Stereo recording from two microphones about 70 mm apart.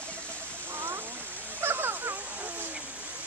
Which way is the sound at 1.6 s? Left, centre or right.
Right.